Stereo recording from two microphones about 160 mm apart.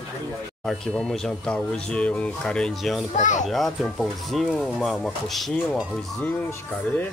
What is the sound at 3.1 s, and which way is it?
Speech, 50° left (ahead or behind).